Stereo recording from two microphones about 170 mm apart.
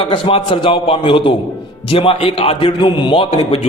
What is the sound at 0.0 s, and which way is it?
A man's voice, 30° left (ahead or behind).